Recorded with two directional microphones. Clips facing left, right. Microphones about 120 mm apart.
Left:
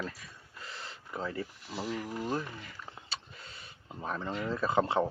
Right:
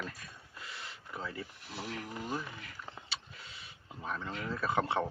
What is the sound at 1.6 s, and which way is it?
Speech, 55° right (ahead or behind).